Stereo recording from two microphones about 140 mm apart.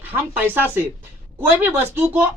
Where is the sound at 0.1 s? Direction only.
15° right (ahead or behind).